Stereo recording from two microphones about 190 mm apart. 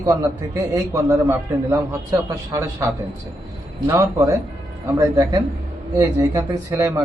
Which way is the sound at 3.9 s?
15° right (ahead or behind).